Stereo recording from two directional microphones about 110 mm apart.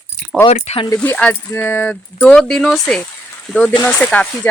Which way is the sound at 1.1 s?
15° left (ahead or behind).